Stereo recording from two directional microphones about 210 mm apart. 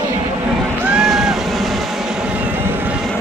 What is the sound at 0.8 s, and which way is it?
Vehicle, 5° right (ahead or behind).